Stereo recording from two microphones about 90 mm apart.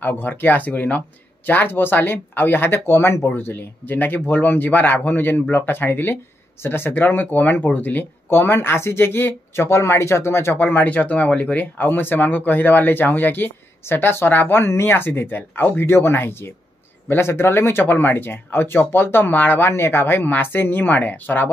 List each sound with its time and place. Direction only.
0.0 s speech: 20° left (ahead or behind)